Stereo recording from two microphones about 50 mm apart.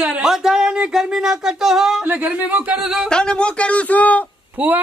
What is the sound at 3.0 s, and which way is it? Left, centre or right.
Speech, centre.